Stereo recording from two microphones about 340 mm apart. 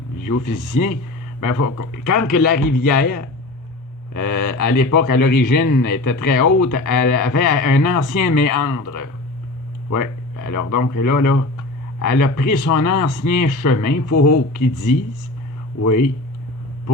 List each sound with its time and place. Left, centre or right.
0.3 s speech: left